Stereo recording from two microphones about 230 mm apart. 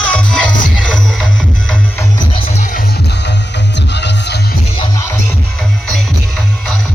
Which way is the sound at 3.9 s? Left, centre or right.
Left.